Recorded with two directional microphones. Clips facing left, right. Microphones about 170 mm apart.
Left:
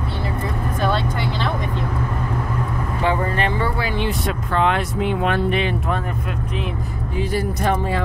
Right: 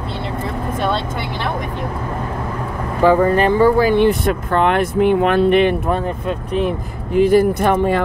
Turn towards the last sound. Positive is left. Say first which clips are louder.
# right 6 dB
turn(degrees=-55)  # may be behind; listen again after turning